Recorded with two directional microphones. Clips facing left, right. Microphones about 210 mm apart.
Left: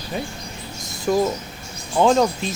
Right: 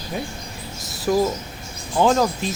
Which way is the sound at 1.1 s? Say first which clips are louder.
Even; centre (ahead or behind).